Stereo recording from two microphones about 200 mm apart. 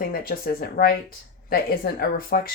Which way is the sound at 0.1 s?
50° left (ahead or behind).